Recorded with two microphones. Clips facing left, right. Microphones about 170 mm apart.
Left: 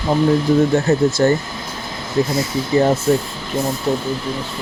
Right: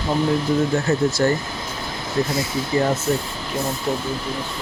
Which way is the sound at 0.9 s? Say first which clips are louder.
Left 4 dB; 35° left (ahead or behind).